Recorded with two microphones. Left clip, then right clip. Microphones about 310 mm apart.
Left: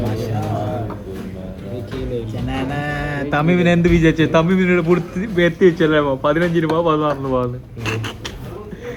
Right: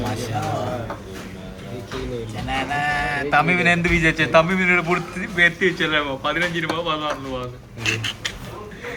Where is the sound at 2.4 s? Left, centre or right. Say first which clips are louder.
Right 5 dB; centre.